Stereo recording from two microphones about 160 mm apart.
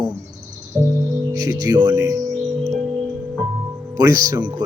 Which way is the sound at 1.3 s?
20° right (ahead or behind).